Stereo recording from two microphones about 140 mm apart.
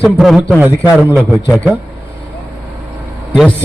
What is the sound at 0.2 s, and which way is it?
A man's voice, 5° right (ahead or behind).